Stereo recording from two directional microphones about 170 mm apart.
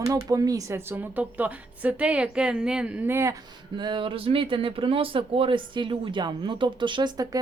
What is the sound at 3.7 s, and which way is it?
Speech, 25° right (ahead or behind).